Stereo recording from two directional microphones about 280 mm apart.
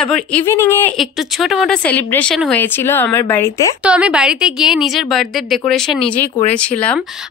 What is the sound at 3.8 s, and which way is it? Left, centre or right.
Speech, centre.